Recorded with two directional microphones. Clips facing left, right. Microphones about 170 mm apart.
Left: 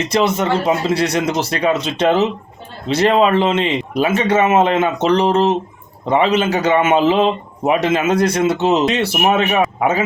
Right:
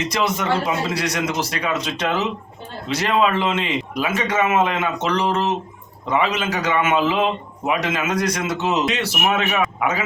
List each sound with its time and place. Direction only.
0.1 s speech: 30° left (ahead or behind)